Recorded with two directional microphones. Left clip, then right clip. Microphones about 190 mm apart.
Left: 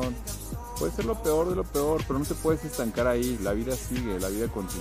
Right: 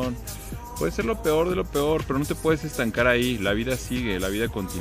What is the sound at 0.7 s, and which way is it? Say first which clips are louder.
Speech: right 3 dB; 20° right (ahead or behind).